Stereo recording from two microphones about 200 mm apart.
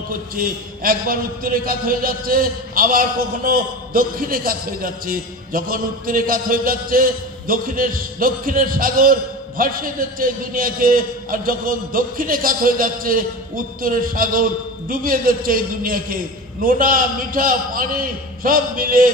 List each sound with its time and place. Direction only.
0.4 s a man's voice: 45° right (ahead or behind)